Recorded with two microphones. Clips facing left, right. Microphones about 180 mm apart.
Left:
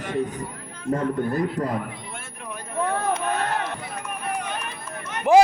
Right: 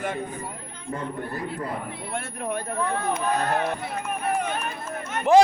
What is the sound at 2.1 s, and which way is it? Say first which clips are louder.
Speech: right 8 dB; 40° right (ahead or behind).